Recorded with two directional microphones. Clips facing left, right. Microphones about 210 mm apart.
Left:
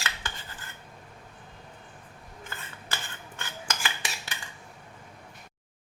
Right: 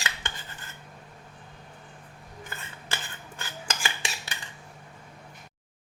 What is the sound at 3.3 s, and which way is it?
Filing, 30° right (ahead or behind).